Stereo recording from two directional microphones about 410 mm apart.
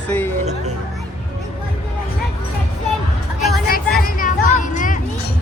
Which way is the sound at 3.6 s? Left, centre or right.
Left.